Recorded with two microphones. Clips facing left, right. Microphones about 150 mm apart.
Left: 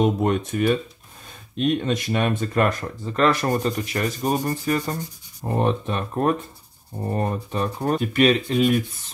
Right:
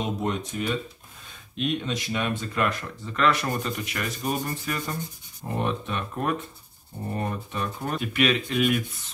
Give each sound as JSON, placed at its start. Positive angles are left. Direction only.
{"t": 0.0, "sound": "speech", "side_deg": 55}